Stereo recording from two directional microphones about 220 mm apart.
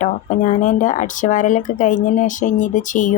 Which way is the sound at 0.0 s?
35° left (ahead or behind).